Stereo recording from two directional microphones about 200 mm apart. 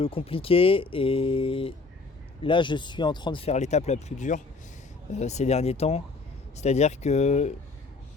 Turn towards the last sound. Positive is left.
turn(degrees=35)  # may be behind; listen again after turning